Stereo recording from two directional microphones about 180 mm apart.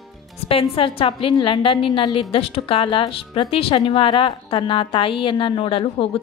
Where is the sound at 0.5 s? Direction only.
30° left (ahead or behind).